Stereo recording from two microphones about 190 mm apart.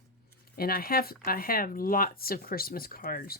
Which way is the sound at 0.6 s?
50° left (ahead or behind).